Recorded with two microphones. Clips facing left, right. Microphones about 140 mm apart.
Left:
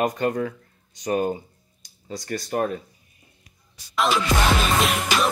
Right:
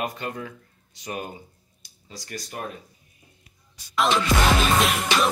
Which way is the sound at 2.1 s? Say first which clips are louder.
Left 9 dB; 50° left (ahead or behind).